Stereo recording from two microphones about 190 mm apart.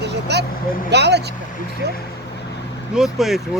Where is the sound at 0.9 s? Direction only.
60° right (ahead or behind).